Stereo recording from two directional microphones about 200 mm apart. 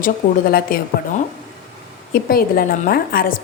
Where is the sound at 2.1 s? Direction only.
50° left (ahead or behind).